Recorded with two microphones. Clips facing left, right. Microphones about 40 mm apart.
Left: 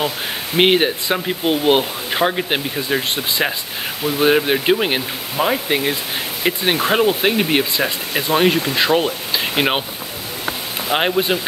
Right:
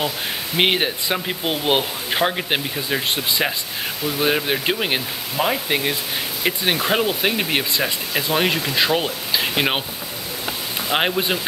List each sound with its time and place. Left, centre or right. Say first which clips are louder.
0.6 s speech: left 5 dB; centre
8.1 s speech: left 4 dB; centre
8.4 s speech: left 4 dB; centre
10.9 s speech: left 3 dB; centre